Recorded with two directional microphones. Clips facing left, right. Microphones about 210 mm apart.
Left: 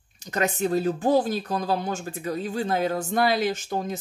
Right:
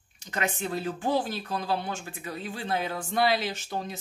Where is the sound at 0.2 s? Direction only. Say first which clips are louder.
Left 6 dB; 40° left (ahead or behind).